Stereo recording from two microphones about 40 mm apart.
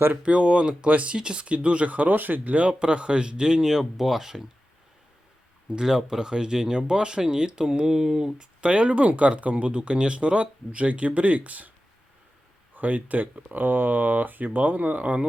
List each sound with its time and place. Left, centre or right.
0.2 s speech: right
2.1 s speech: right
2.4 s speech: right; by 4.4 s centre
5.7 s speech: centre
8.8 s speech: right
12.7 s speech: right